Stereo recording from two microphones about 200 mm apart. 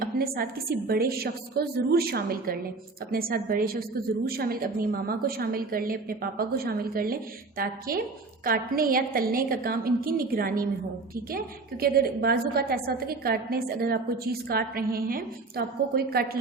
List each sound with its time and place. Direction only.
0.0 s a sound: 45° right (ahead or behind)
0.9 s a woman's voice: 50° right (ahead or behind)
11.8 s a woman's voice: 50° right (ahead or behind)